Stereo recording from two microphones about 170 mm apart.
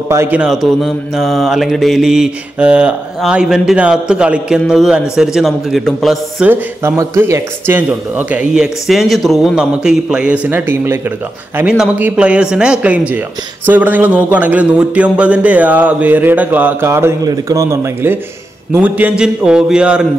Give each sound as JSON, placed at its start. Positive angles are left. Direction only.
{"t": 0.1, "sound": "mantra", "side_deg": -10}
{"t": 6.4, "sound": "speech", "side_deg": -15}
{"t": 18.7, "sound": "mantra", "side_deg": -10}